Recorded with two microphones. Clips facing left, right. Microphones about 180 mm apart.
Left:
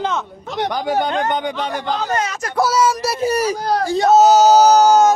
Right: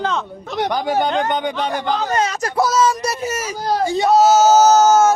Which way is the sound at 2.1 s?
35° right (ahead or behind).